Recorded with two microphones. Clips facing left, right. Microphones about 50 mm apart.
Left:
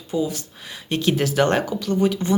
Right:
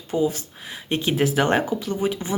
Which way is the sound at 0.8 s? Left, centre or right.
Centre.